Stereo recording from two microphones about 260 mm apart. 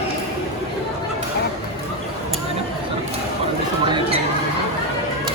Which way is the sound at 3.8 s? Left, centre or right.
Centre.